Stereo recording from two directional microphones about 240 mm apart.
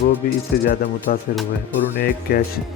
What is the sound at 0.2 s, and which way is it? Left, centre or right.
Speech, left.